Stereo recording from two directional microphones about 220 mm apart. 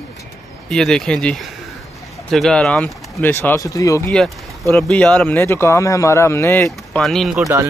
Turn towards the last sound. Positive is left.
turn(degrees=0)  # may be behind; listen again after turning